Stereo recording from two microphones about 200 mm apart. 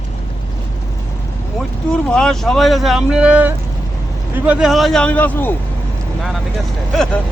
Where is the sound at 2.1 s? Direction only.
5° left (ahead or behind).